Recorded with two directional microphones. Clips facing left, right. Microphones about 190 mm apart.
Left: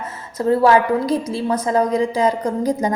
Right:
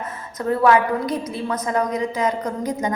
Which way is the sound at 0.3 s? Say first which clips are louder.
Left 3 dB; 30° left (ahead or behind).